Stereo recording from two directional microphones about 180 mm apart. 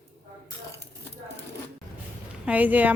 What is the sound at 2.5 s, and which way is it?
Speech, 10° right (ahead or behind).